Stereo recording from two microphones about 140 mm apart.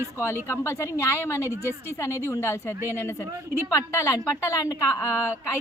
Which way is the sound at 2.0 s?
20° left (ahead or behind).